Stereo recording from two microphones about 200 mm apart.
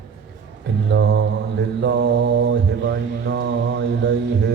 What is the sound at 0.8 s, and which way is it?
Mantra, 60° right (ahead or behind).